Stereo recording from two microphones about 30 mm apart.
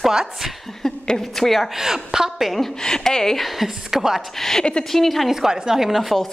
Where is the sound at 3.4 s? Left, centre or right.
Centre.